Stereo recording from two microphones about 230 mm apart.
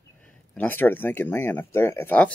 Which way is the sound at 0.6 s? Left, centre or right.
Centre.